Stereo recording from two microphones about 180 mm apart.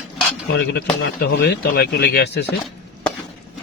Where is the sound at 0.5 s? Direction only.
65° left (ahead or behind).